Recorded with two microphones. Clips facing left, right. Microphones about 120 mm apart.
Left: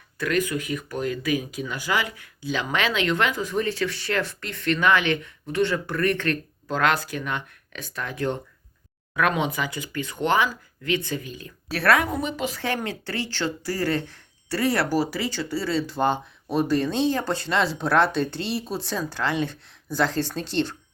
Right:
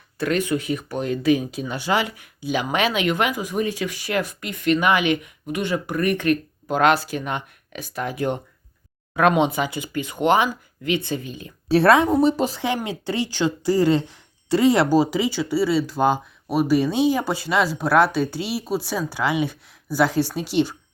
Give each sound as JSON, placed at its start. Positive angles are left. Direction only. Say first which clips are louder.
{"t": 0.2, "sound": "speech", "louder": "right 3 dB", "side_deg": -25}
{"t": 12.5, "sound": "speech", "louder": "right 3 dB", "side_deg": -15}